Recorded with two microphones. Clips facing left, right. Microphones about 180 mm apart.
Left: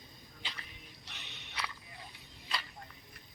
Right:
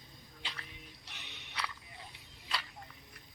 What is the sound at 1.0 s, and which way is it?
Music, 10° right (ahead or behind).